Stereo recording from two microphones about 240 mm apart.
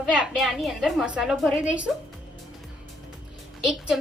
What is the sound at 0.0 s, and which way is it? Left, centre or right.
A woman's voice, centre.